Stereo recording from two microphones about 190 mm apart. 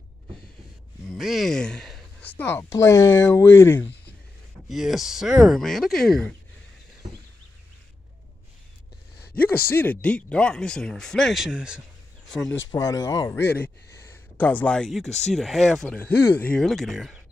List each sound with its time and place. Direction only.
1.0 s a sound: centre (ahead or behind)
2.5 s speech: 15° left (ahead or behind)
4.6 s speech: centre (ahead or behind)
9.3 s speech: 10° left (ahead or behind)
12.7 s speech: 15° left (ahead or behind); by 15.0 s centre (ahead or behind)
15.0 s speech: 35° left (ahead or behind)
15.3 s speech: centre (ahead or behind)